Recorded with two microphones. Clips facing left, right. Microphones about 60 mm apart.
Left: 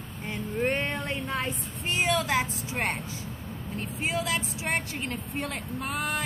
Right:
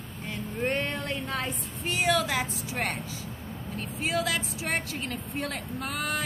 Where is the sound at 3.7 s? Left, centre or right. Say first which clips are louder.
Right 1 dB; left.